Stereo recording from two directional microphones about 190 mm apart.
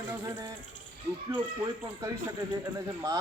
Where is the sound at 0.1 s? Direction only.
15° right (ahead or behind).